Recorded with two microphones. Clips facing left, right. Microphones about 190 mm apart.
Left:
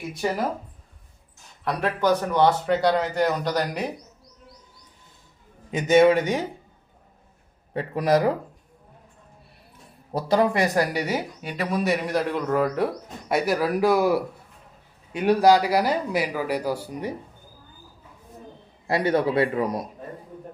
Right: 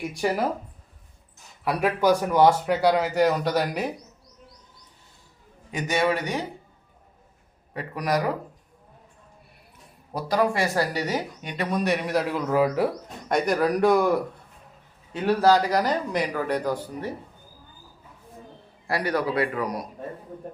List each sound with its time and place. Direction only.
1.6 s a man's voice: 10° right (ahead or behind)
5.7 s a man's voice: 20° left (ahead or behind)
7.7 s a man's voice: 25° left (ahead or behind)
10.1 s speech: 25° left (ahead or behind)
18.9 s a man's voice: 25° left (ahead or behind)